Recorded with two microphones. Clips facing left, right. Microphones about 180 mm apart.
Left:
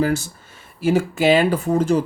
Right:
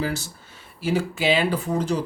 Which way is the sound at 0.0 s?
50° left (ahead or behind).